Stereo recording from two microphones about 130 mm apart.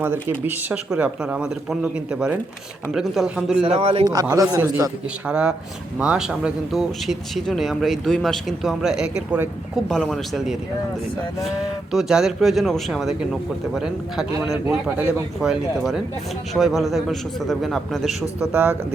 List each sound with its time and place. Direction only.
0.0 s speech: 15° right (ahead or behind)
3.7 s a man's voice: 50° right (ahead or behind)
4.0 s a man's voice: 30° right (ahead or behind)
5.2 s speech: 5° right (ahead or behind)
18.5 s speech: 15° right (ahead or behind)